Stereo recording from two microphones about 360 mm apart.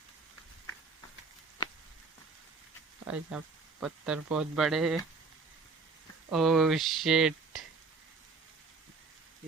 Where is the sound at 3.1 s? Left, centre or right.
Centre.